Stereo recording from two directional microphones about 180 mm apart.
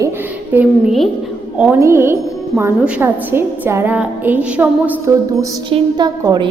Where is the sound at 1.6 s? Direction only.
15° right (ahead or behind).